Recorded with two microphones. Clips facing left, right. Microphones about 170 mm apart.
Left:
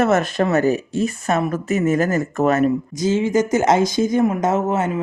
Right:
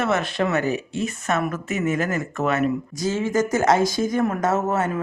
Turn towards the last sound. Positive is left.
turn(degrees=20)  # may be behind; listen again after turning